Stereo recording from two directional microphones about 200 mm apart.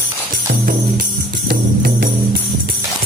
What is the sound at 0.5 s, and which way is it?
Music, 45° right (ahead or behind).